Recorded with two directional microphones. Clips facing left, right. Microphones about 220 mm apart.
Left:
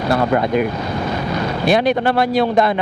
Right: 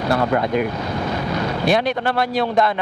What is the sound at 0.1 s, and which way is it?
A man's voice, 15° left (ahead or behind).